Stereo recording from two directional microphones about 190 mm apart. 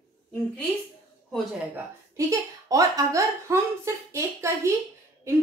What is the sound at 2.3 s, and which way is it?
A woman's voice, 20° right (ahead or behind).